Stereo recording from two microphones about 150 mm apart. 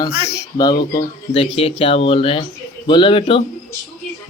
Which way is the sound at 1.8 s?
40° left (ahead or behind).